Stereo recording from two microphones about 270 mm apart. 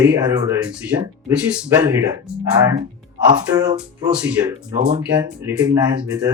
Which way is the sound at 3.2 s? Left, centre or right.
Centre.